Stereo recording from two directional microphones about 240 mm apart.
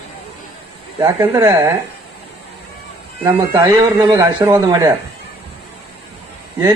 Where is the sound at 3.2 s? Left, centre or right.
Centre.